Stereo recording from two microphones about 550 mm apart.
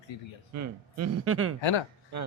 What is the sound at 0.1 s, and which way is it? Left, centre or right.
Speech, left.